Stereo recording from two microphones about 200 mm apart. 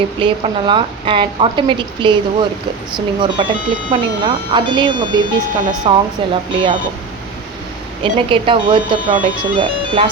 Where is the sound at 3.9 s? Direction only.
25° right (ahead or behind).